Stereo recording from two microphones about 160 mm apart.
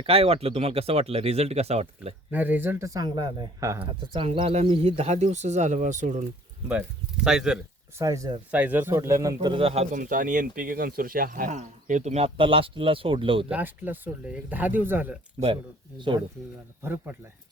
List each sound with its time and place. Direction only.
0.0 s speech: 40° right (ahead or behind)
2.3 s a man's voice: 10° right (ahead or behind); by 6.2 s 50° right (ahead or behind)
6.7 s speech: 5° right (ahead or behind)
7.9 s a man's voice: 20° right (ahead or behind)
8.4 s a man's voice: 10° right (ahead or behind); by 10.0 s 40° right (ahead or behind)
10.0 s speech: 60° right (ahead or behind); by 13.5 s 35° right (ahead or behind)
13.5 s speech: 10° right (ahead or behind)
16.0 s a man's voice: 30° right (ahead or behind)
16.8 s speech: 15° right (ahead or behind)